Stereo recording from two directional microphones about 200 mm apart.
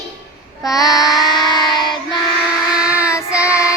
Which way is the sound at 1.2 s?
20° left (ahead or behind).